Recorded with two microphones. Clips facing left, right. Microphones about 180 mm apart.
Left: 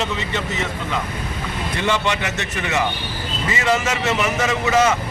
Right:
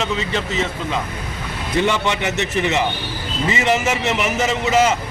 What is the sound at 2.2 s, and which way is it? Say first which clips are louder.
A man's voice: right 5 dB; 20° right (ahead or behind).